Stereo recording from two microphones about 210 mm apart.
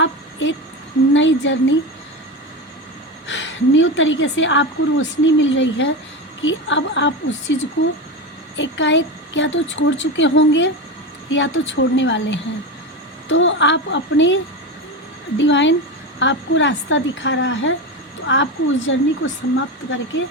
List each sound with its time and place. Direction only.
0.0 s a sound: 60° left (ahead or behind)
1.1 s a woman's voice: 60° left (ahead or behind)
3.2 s a woman's voice: 60° left (ahead or behind)
15.4 s a woman's voice: 60° left (ahead or behind)